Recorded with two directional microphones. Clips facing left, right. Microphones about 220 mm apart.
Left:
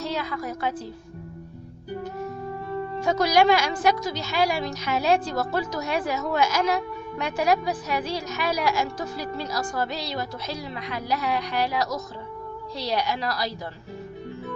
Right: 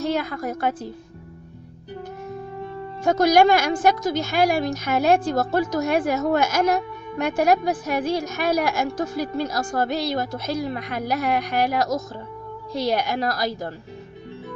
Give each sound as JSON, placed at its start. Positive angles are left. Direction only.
{"t": 0.0, "sound": "a woman's voice", "side_deg": -50}
{"t": 3.0, "sound": "a woman's voice", "side_deg": -50}